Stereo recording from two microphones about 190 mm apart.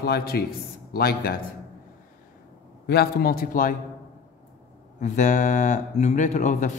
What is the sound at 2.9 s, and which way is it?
Speech, 55° left (ahead or behind).